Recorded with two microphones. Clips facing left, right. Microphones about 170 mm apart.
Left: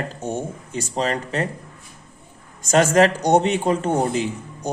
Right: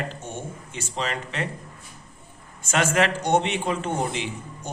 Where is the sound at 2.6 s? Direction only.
40° left (ahead or behind).